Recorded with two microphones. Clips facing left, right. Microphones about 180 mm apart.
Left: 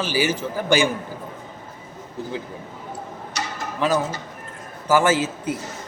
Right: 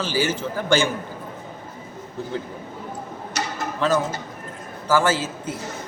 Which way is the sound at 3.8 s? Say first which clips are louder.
Even; 15° left (ahead or behind).